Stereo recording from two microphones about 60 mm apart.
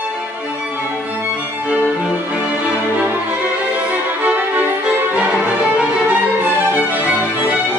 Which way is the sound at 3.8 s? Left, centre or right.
Right.